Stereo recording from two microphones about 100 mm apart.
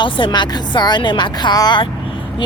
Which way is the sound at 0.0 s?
50° left (ahead or behind).